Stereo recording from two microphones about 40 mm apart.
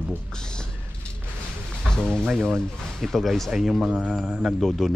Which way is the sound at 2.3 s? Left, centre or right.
Centre.